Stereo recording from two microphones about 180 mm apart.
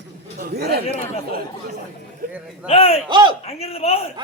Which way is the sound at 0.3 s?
60° right (ahead or behind).